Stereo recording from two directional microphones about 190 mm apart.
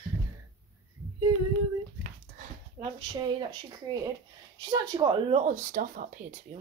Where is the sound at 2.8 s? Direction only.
30° right (ahead or behind).